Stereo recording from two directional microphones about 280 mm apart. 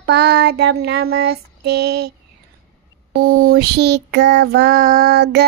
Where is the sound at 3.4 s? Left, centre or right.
Right.